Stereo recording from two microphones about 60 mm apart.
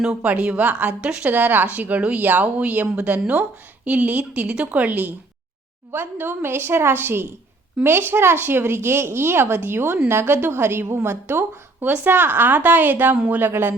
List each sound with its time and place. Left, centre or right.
0.0 s a woman's voice: centre
13.4 s a woman's voice: right